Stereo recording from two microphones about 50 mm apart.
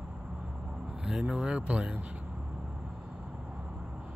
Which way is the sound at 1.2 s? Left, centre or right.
Centre.